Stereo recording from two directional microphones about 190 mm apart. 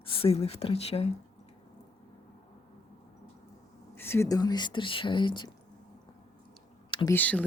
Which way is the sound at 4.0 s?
15° left (ahead or behind).